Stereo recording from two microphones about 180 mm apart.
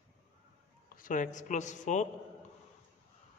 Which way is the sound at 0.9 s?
45° left (ahead or behind).